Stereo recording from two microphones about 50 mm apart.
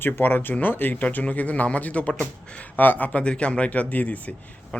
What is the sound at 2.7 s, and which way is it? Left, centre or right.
Speech, left.